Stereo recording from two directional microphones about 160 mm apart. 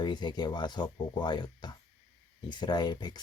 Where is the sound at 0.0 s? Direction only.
25° left (ahead or behind).